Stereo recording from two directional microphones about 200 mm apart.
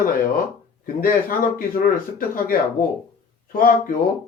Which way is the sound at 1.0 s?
45° left (ahead or behind).